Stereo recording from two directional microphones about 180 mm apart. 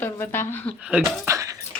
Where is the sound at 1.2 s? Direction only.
15° right (ahead or behind).